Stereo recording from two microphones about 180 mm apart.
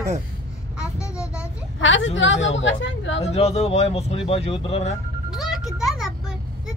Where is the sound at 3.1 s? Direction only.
35° left (ahead or behind).